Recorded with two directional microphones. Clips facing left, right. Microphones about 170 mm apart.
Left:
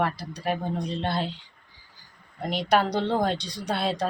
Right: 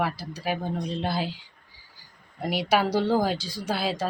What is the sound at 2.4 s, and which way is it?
Speech, 5° right (ahead or behind).